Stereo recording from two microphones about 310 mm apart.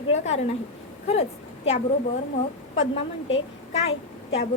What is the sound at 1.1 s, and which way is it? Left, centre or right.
Speech, centre.